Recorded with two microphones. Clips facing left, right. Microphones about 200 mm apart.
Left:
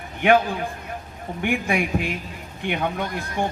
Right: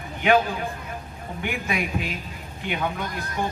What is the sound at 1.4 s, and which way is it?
Speech, 55° left (ahead or behind).